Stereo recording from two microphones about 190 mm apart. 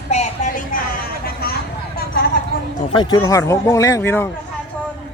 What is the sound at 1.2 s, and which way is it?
Vehicle, 55° left (ahead or behind).